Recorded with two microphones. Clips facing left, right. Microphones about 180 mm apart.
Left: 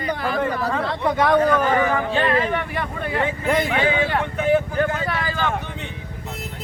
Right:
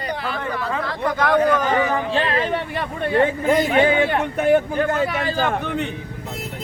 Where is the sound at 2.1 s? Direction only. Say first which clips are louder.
Left 1 dB; 30° right (ahead or behind).